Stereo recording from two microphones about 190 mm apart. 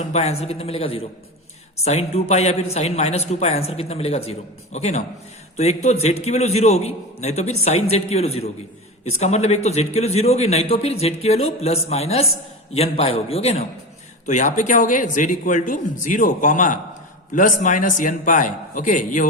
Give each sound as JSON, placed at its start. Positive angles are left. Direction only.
{"t": 0.1, "sound": "a man's voice", "side_deg": 35}